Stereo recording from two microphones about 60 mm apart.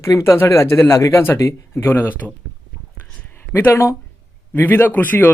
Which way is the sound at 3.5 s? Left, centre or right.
Left.